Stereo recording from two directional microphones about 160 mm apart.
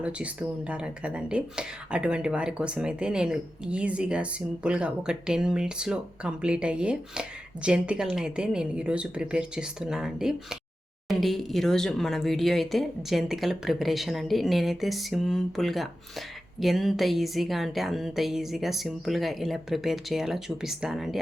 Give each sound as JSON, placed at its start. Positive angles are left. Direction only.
{"t": 0.0, "sound": "speech", "side_deg": -10}